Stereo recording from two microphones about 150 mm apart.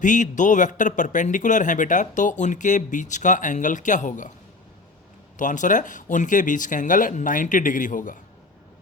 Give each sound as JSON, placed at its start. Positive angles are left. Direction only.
{"t": 0.0, "sound": "speech", "side_deg": 55}
{"t": 5.4, "sound": "speech", "side_deg": 60}